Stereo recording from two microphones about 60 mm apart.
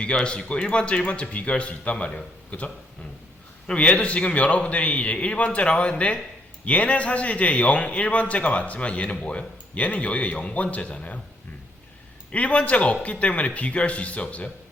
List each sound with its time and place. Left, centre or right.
0.0 s a man's voice: centre
12.3 s a man's voice: left